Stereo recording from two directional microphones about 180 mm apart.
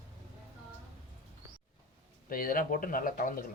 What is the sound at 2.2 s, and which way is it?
Speech, 55° left (ahead or behind).